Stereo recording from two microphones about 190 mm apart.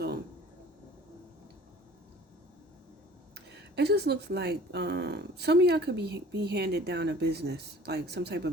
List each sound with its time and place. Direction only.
3.3 s speech: 60° right (ahead or behind)